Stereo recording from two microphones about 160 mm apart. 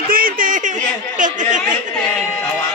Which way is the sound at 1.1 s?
50° right (ahead or behind).